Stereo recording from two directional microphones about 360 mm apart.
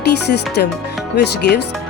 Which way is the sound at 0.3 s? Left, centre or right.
Left.